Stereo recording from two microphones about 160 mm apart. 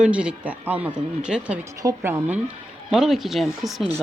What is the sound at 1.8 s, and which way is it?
Speech, 20° right (ahead or behind).